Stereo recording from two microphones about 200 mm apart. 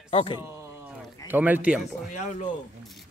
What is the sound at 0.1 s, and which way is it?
Speech, 30° left (ahead or behind).